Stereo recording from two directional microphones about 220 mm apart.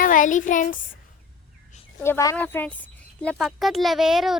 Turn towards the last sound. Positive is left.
turn(degrees=0)  # may be behind; listen again after turning